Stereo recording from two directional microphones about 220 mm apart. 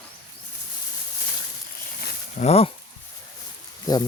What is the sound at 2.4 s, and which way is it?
Speech, 30° left (ahead or behind).